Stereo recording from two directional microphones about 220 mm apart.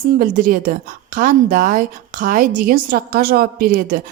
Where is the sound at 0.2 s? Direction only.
40° right (ahead or behind).